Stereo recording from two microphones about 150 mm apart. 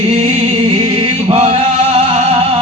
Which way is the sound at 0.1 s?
40° right (ahead or behind).